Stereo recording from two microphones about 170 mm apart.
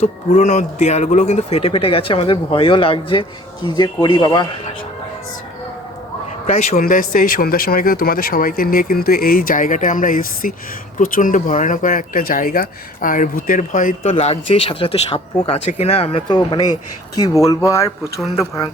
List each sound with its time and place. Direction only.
0.0 s a man's voice: 45° left (ahead or behind); by 4.4 s 20° left (ahead or behind)
6.5 s a man's voice: 40° left (ahead or behind)
6.7 s speech: 55° left (ahead or behind)
14.1 s a man's voice: 35° left (ahead or behind); by 18.7 s 20° left (ahead or behind)